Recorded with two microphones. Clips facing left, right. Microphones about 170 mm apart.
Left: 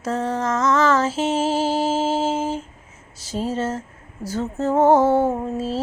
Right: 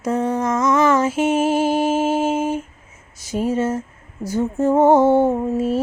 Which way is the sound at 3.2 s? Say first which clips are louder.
Right 4 dB; 15° right (ahead or behind).